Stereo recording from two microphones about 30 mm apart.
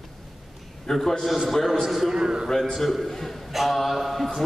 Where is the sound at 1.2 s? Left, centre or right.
Centre.